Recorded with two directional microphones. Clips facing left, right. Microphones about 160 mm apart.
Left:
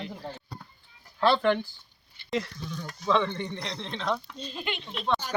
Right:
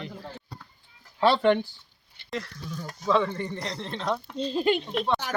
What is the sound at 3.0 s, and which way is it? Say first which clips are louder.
Speech: right 2 dB; 5° right (ahead or behind).